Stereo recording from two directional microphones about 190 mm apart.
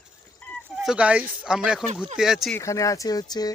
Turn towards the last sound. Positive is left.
turn(degrees=20)  # may be behind; listen again after turning